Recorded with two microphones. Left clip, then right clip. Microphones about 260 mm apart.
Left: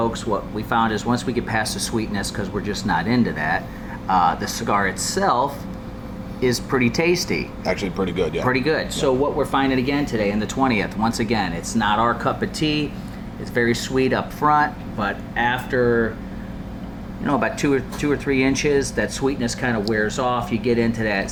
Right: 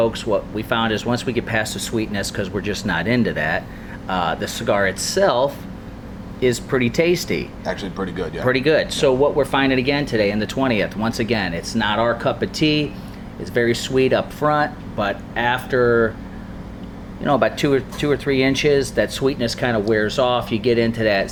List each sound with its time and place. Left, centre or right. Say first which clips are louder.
0.0 s speech: right 4 dB; right
6.7 s speech: even; right
7.6 s speech: left 2 dB; left
8.4 s speech: right 8 dB; right
17.2 s speech: right 3 dB; right